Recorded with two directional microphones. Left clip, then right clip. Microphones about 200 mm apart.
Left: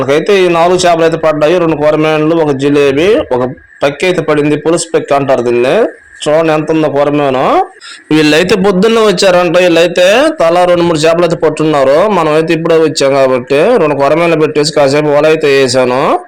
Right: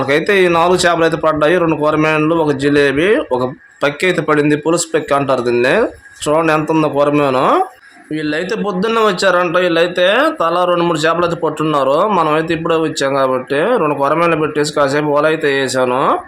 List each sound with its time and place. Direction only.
0.1 s a man's voice: 10° left (ahead or behind)
8.1 s a man's voice: 40° left (ahead or behind); by 16.1 s 20° left (ahead or behind)